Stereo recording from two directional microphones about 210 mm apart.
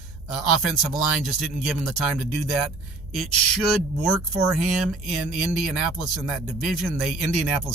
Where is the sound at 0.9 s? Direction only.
Centre (ahead or behind).